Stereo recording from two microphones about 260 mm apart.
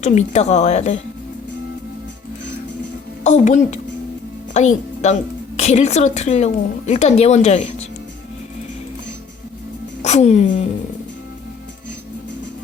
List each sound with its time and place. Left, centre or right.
0.0 s a woman's voice: left
3.2 s a woman's voice: left
5.0 s a woman's voice: left
10.0 s speech: left